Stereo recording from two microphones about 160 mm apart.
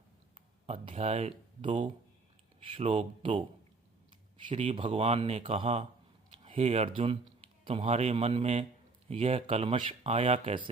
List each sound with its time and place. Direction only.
0.3 s speech: 40° right (ahead or behind)